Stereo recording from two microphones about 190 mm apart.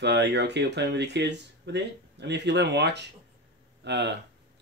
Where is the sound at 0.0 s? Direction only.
65° right (ahead or behind).